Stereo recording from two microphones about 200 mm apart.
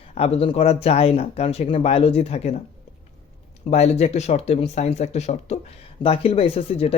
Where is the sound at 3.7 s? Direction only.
35° left (ahead or behind).